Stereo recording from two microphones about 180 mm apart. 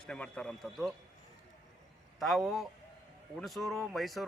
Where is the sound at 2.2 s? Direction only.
Centre (ahead or behind).